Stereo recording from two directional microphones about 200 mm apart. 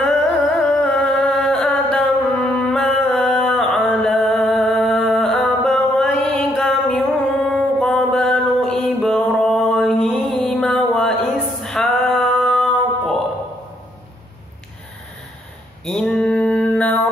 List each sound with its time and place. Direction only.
0.8 s music: 5° left (ahead or behind)
15.8 s mantra: 5° left (ahead or behind)